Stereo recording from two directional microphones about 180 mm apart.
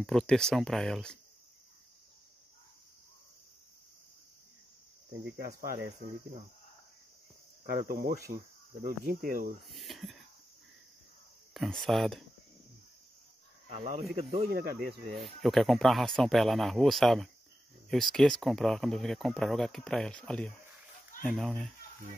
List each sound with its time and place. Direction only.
0.0 s speech: centre (ahead or behind)
5.4 s speech: 55° right (ahead or behind)
7.6 s speech: 55° right (ahead or behind)
9.7 s speech: centre (ahead or behind)
11.5 s speech: centre (ahead or behind)
13.7 s speech: 35° right (ahead or behind)
14.5 s speech: 55° right (ahead or behind)
15.4 s speech: centre (ahead or behind)